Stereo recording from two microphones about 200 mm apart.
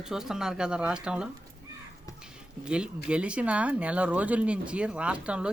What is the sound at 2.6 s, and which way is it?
Speech, 5° right (ahead or behind).